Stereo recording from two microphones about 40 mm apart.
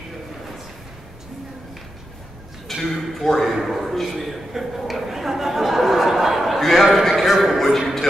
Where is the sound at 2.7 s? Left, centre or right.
Centre.